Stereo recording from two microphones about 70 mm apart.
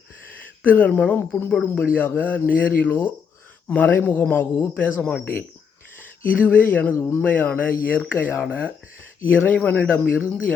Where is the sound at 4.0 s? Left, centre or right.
Left.